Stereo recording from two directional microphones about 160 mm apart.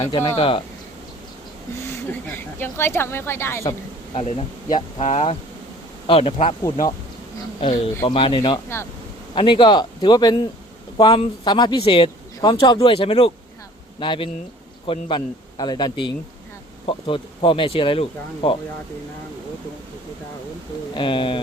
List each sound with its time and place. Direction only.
0.3 s a man's voice: 35° left (ahead or behind)
1.8 s a woman's voice: 15° left (ahead or behind)
4.1 s a man's voice: 40° left (ahead or behind)
8.0 s a man's voice: 30° left (ahead or behind)
20.9 s a man's voice: 30° left (ahead or behind)